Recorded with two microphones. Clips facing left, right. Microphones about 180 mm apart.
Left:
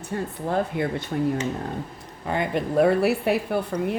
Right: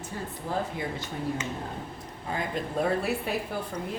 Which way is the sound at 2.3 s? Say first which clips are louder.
Left 8 dB; 70° left (ahead or behind).